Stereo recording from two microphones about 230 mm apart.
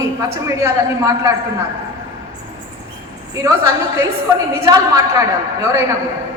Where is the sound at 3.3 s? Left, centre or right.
Centre.